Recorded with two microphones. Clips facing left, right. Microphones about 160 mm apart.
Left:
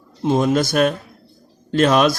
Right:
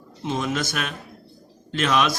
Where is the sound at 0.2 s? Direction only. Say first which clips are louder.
Left 9 dB; 40° left (ahead or behind).